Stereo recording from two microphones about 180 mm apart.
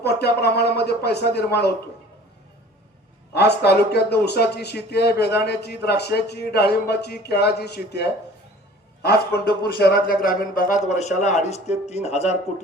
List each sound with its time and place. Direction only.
0.0 s a man's voice: 65° left (ahead or behind)
3.3 s a man's voice: 65° left (ahead or behind)
9.0 s a man's voice: 55° left (ahead or behind)
10.8 s a man's voice: 40° left (ahead or behind)